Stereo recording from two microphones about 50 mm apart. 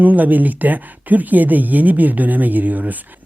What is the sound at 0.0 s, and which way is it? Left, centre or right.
Speech, right.